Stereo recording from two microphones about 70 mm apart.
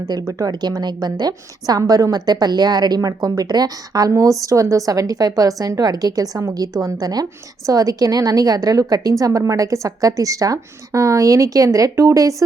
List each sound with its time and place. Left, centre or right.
0.0 s a woman's voice: right
0.5 s speech: right
1.0 s speech: right
4.2 s a woman's voice: right